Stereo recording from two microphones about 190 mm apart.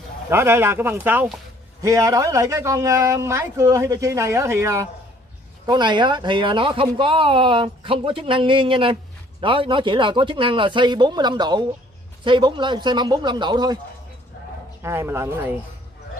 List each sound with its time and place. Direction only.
0.3 s speech: 15° right (ahead or behind)
14.8 s speech: 15° right (ahead or behind)